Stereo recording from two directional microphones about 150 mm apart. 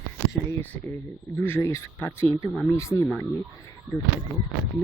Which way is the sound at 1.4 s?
15° left (ahead or behind).